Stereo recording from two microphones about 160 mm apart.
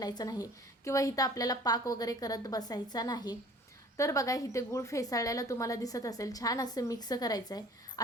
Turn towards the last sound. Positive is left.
turn(degrees=25)  # may be behind; listen again after turning